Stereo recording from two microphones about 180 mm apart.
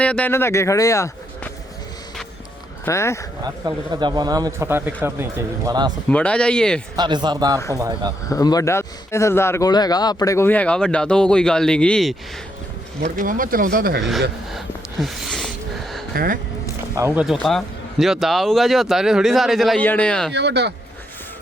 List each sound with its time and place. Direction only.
0.0 s a man's voice: 5° left (ahead or behind)
2.8 s a man's voice: 15° left (ahead or behind)
3.4 s speech: 20° right (ahead or behind)
6.1 s speech: 5° left (ahead or behind)
6.9 s speech: 25° right (ahead or behind)
8.3 s a man's voice: 20° left (ahead or behind); by 12.1 s 5° left (ahead or behind)
13.1 s speech: 50° right (ahead or behind)
14.0 s speech: centre (ahead or behind)
15.0 s a sound: centre (ahead or behind)
16.1 s speech: 50° right (ahead or behind)
17.0 s speech: 10° right (ahead or behind)
20.3 s speech: 70° right (ahead or behind)